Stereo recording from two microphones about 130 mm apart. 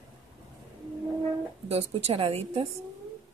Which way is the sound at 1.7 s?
50° right (ahead or behind).